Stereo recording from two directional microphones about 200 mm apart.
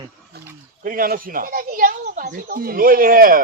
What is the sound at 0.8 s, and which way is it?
Speech, 45° right (ahead or behind).